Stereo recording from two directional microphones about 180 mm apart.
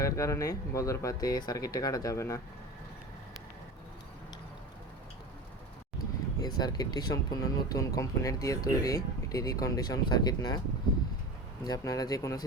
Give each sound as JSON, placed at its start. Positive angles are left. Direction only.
{"t": 0.0, "sound": "speech", "side_deg": 15}
{"t": 6.4, "sound": "speech", "side_deg": 20}
{"t": 11.6, "sound": "speech", "side_deg": 20}